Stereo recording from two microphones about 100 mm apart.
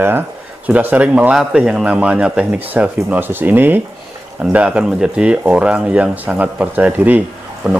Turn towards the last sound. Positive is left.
turn(degrees=-10)  # may be behind; listen again after turning